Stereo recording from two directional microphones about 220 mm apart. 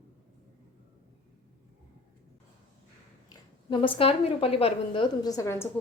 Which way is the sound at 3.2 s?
20° left (ahead or behind).